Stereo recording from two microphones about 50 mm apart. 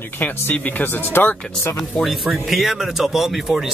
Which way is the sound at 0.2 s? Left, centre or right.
Left.